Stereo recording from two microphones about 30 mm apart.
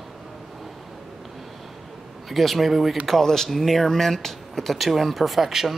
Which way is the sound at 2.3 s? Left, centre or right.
Centre.